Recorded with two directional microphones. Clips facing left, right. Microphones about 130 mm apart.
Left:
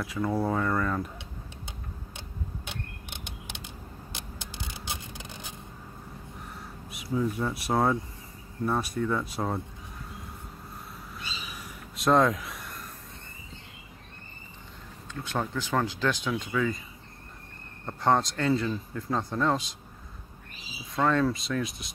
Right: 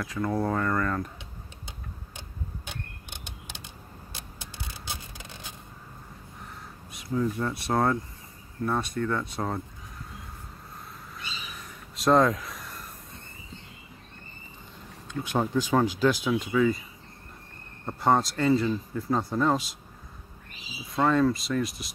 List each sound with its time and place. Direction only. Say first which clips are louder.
0.0 s speech: even; 5° left (ahead or behind)
3.3 s typing: left 1 dB; 15° left (ahead or behind)
6.9 s speech: right 1 dB; 5° left (ahead or behind)
11.5 s a sound: left 1 dB; centre (ahead or behind)
15.0 s speech: right 4 dB; 15° right (ahead or behind)
17.8 s speech: right 1 dB; 5° right (ahead or behind)
20.9 s speech: right 2 dB; 5° right (ahead or behind)